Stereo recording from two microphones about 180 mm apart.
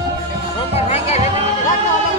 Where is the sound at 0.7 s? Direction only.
35° left (ahead or behind).